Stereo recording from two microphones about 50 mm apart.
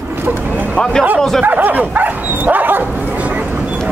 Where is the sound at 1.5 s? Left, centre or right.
Right.